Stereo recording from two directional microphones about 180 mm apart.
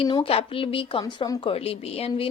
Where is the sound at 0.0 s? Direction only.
30° left (ahead or behind).